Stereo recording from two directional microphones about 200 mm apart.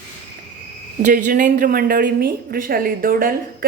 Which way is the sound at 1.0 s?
40° right (ahead or behind).